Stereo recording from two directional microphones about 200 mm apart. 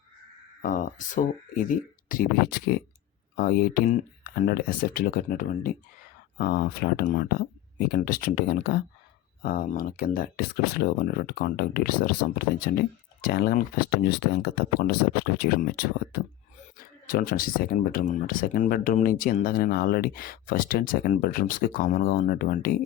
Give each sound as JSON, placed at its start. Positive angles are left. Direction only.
{"t": 0.6, "sound": "speech", "side_deg": 45}